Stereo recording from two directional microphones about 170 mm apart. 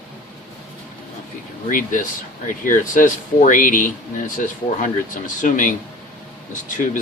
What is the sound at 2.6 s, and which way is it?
Speech, 50° left (ahead or behind).